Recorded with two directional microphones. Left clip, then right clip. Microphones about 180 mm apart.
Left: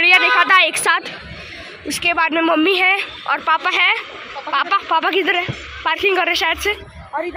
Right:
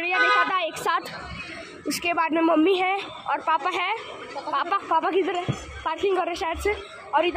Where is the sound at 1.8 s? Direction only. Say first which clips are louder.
Left 7 dB; centre (ahead or behind).